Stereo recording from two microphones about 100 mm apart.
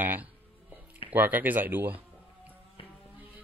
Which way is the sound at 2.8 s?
60° left (ahead or behind).